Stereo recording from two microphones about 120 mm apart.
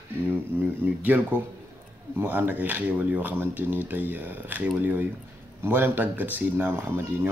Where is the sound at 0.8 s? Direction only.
15° right (ahead or behind).